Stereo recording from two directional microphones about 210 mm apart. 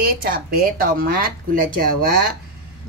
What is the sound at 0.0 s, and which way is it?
A woman's voice, 45° right (ahead or behind).